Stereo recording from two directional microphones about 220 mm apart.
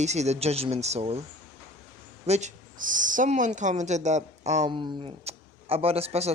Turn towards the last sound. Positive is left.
turn(degrees=-30)  # may be behind; listen again after turning